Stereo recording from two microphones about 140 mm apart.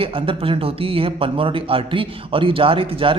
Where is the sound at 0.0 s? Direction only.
40° right (ahead or behind).